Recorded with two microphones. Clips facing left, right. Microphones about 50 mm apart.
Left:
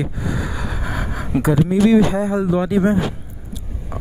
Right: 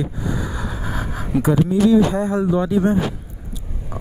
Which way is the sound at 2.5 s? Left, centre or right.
Left.